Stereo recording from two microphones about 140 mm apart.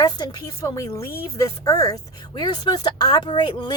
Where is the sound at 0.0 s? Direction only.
30° left (ahead or behind).